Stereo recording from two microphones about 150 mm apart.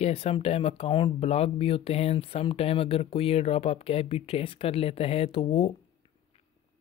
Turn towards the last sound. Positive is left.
turn(degrees=40)  # may be behind; listen again after turning